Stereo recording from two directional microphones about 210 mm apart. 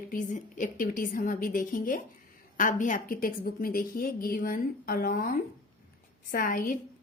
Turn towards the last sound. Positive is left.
turn(degrees=40)  # may be behind; listen again after turning